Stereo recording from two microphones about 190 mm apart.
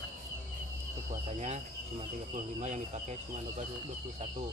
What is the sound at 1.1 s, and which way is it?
Speech, 35° right (ahead or behind).